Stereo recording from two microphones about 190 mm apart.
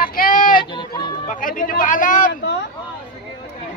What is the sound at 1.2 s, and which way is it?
Speech, 45° left (ahead or behind).